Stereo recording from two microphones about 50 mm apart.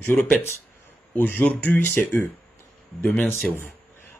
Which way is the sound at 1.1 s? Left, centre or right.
Left.